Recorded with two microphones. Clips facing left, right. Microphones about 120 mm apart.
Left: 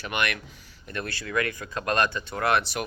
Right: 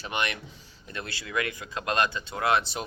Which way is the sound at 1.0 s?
50° left (ahead or behind).